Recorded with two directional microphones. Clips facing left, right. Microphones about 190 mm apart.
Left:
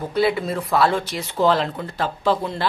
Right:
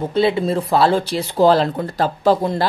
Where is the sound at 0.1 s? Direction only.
25° right (ahead or behind).